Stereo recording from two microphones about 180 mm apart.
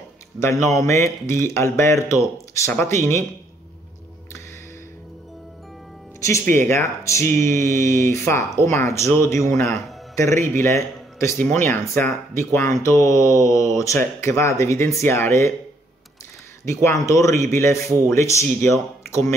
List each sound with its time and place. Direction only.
0.4 s speech: 15° left (ahead or behind)
6.2 s speech: 15° left (ahead or behind)
16.6 s speech: 15° left (ahead or behind)